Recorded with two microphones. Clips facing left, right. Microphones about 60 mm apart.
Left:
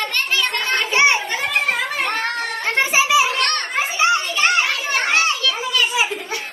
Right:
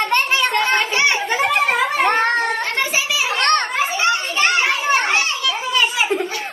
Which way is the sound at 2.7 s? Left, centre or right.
Left.